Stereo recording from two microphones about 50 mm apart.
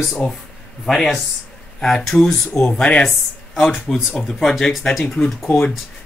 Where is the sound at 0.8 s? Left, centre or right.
Centre.